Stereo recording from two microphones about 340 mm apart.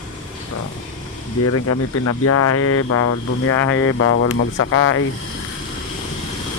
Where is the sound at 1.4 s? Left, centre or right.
Left.